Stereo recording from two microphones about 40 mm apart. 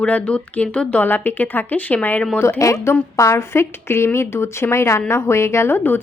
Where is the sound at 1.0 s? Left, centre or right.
Left.